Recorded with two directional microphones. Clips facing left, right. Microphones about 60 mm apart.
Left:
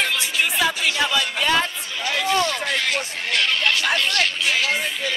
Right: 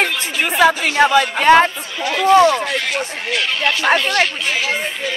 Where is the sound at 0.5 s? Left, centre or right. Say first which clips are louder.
Right 7 dB; right.